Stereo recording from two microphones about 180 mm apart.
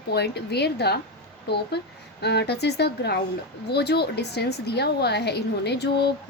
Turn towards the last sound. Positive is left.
turn(degrees=70)  # may be behind; listen again after turning